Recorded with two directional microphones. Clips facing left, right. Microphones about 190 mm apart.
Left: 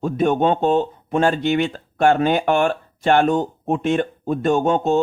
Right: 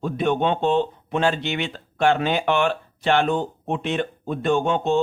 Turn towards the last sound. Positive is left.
turn(degrees=45)  # may be behind; listen again after turning